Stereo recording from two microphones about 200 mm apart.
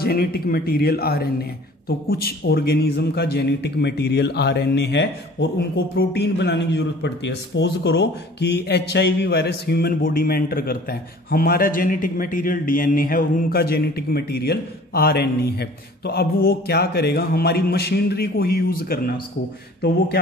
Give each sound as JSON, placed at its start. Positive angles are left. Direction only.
{"t": 0.0, "sound": "speech", "side_deg": 50}